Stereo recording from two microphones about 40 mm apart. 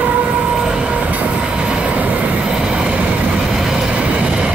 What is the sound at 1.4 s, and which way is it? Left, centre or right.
Train, centre.